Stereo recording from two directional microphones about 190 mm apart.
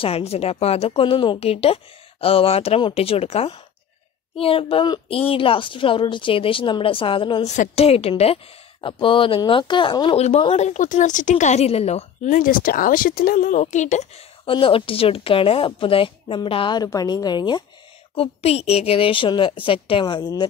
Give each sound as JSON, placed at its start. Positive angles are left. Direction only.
{"t": 0.0, "sound": "speech", "side_deg": 30}